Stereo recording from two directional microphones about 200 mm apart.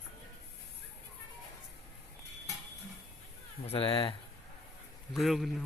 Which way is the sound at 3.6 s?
25° left (ahead or behind).